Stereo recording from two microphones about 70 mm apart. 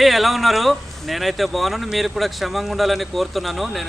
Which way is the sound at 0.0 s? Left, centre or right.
Centre.